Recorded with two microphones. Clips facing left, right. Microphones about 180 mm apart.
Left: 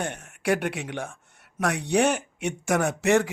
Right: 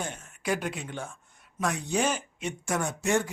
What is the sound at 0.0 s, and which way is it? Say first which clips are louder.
A man's voice: left 5 dB; 70° left (ahead or behind).